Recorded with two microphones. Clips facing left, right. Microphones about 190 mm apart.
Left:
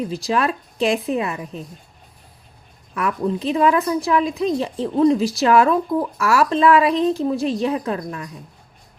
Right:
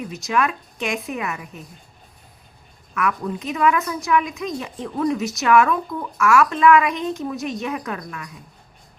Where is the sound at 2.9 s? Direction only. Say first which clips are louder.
Left 3 dB; 30° left (ahead or behind).